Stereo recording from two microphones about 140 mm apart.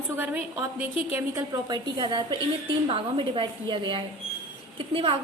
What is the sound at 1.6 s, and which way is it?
A woman's voice, 30° right (ahead or behind).